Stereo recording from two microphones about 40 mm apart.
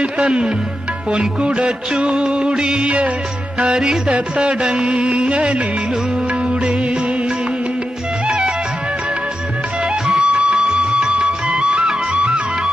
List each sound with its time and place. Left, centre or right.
0.0 s music: right
10.0 s music: right